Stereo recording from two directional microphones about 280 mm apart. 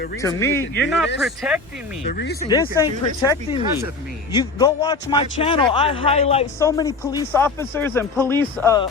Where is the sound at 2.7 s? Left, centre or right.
Centre.